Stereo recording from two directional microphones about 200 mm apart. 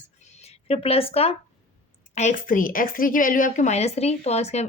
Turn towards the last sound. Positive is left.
turn(degrees=35)  # may be behind; listen again after turning